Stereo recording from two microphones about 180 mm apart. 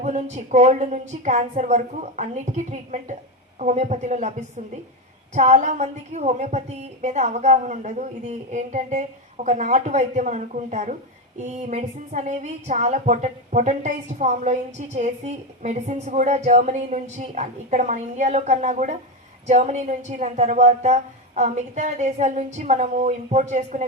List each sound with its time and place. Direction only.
0.0 s a woman's voice: 40° right (ahead or behind)